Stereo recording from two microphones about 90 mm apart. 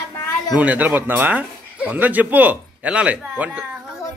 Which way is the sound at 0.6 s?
15° right (ahead or behind).